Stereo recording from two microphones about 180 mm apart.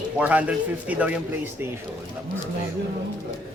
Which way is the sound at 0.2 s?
5° right (ahead or behind).